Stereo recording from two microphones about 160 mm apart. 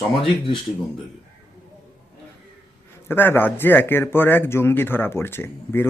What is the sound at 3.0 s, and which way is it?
Speech, 15° left (ahead or behind).